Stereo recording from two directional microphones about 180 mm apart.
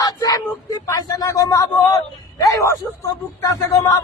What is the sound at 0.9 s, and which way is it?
A man's voice, 20° left (ahead or behind).